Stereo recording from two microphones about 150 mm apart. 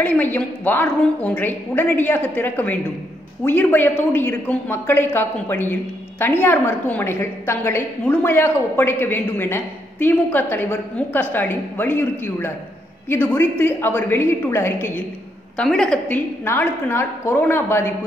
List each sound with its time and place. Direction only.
0.0 s a man's voice: 10° left (ahead or behind)
16.4 s a man's voice: 15° left (ahead or behind)